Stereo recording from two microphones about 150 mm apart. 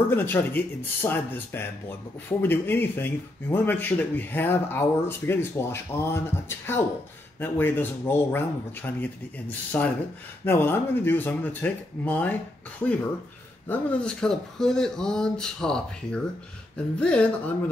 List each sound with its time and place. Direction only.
0.1 s speech: 15° left (ahead or behind)
13.7 s speech: 10° left (ahead or behind)